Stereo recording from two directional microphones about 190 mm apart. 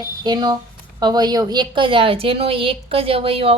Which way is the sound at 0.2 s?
20° right (ahead or behind).